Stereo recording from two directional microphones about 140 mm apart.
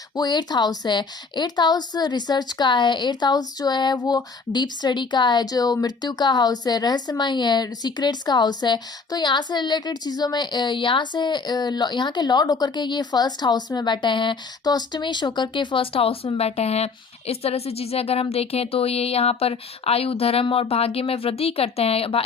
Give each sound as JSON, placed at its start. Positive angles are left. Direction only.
{"t": 0.2, "sound": "a woman's voice", "side_deg": 30}